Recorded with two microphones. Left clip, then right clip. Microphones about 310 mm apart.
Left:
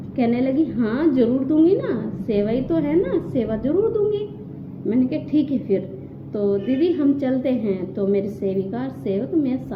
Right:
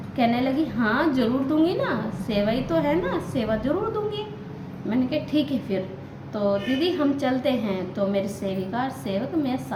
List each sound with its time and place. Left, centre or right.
0.2 s a woman's voice: centre
4.9 s a woman's voice: centre